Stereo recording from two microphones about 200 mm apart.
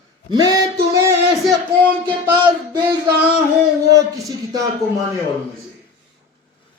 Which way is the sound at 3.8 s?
15° right (ahead or behind).